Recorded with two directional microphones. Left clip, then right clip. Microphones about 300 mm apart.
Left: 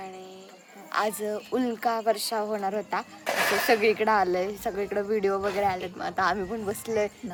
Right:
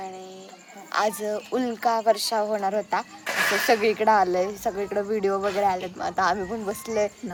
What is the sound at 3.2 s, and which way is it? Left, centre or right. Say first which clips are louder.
Speech: even; left.